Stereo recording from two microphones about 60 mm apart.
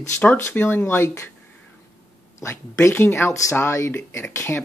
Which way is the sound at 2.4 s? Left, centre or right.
Left.